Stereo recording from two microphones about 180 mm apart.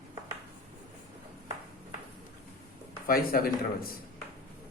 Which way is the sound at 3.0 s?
55° left (ahead or behind).